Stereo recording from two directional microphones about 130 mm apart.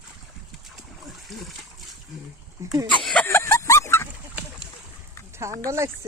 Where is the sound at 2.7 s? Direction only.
25° right (ahead or behind).